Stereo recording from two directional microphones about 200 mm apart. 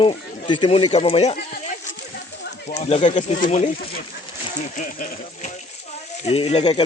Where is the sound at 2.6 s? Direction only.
35° left (ahead or behind).